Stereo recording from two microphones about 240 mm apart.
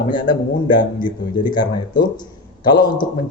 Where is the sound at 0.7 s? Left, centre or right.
Centre.